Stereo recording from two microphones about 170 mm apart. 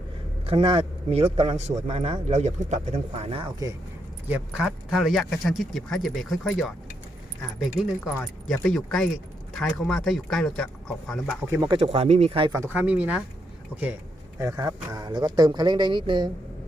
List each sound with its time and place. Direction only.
0.4 s a man's voice: 35° right (ahead or behind)
4.3 s speech: 5° right (ahead or behind)
8.0 s speech: 5° left (ahead or behind)
11.5 s speech: 25° right (ahead or behind)
11.8 s a man's voice: 35° right (ahead or behind)
12.5 s speech: 15° right (ahead or behind)
14.3 s speech: 20° right (ahead or behind)